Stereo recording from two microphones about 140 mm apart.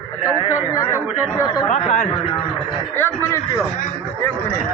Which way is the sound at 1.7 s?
55° left (ahead or behind).